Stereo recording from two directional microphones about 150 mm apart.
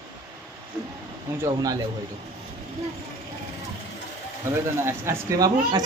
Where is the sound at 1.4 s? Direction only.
25° right (ahead or behind).